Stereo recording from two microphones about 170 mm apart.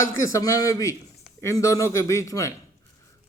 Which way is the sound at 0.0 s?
20° left (ahead or behind).